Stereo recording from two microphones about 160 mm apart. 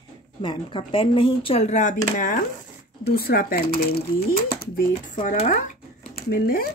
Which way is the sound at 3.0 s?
70° left (ahead or behind).